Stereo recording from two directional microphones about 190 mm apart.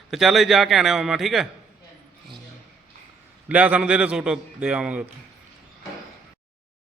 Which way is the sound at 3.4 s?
5° right (ahead or behind).